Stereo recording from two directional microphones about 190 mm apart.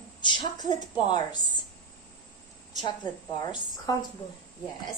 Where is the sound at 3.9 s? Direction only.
20° left (ahead or behind).